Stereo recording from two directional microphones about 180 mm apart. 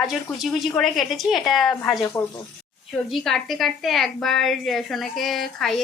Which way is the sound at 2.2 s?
15° left (ahead or behind).